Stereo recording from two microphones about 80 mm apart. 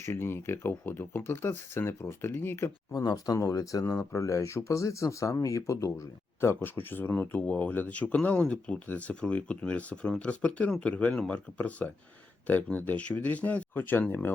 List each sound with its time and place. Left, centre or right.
0.0 s speech: left
2.9 s speech: left